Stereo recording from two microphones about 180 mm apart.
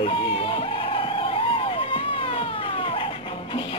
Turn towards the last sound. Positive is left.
turn(degrees=30)  # may be behind; listen again after turning